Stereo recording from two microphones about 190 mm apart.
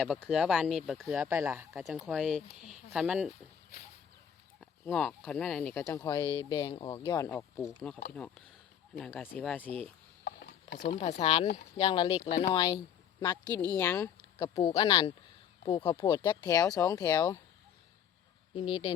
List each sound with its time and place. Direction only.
0.0 s speech: centre (ahead or behind)
1.7 s speech: centre (ahead or behind)
4.6 s speech: 5° left (ahead or behind)
7.3 s speech: 10° left (ahead or behind)
10.2 s a sound: 65° left (ahead or behind)
10.8 s speech: 35° left (ahead or behind); by 17.4 s 15° left (ahead or behind)
18.5 s speech: 25° left (ahead or behind)